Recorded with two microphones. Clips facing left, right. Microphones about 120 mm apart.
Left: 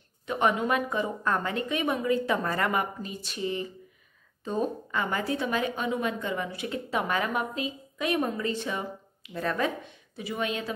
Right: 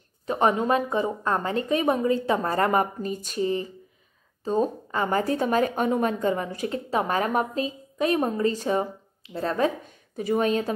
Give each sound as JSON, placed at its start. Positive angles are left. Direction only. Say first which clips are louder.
{"t": 0.3, "sound": "a woman's voice", "louder": "right 4 dB", "side_deg": -35}